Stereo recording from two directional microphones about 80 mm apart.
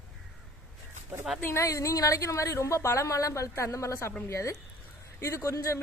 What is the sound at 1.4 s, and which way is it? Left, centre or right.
A woman's voice, left.